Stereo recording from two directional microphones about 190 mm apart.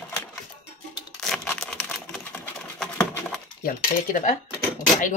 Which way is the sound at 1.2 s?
5° left (ahead or behind).